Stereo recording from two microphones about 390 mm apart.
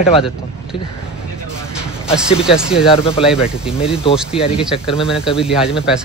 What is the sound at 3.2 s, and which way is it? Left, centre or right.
Speech, centre.